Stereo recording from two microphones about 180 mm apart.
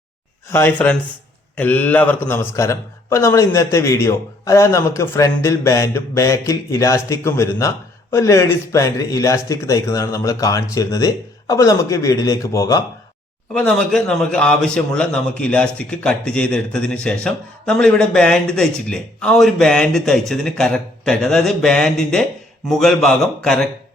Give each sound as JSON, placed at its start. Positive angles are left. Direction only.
{"t": 0.4, "sound": "a man's voice", "side_deg": 15}
{"t": 13.5, "sound": "speech", "side_deg": 5}